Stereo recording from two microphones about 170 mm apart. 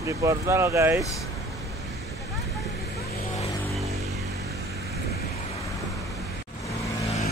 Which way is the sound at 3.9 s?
40° right (ahead or behind).